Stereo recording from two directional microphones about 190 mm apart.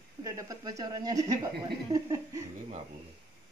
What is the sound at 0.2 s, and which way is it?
A woman's voice, 20° right (ahead or behind).